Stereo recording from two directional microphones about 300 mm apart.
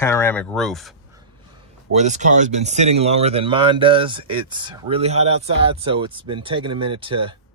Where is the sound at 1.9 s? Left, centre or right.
Right.